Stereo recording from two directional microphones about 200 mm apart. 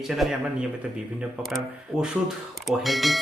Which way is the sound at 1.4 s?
Centre (ahead or behind).